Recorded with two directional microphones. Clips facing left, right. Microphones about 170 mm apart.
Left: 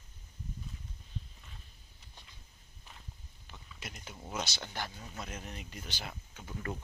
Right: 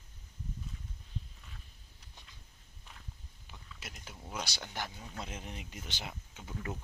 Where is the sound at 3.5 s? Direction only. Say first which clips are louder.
Left 2 dB; 5° right (ahead or behind).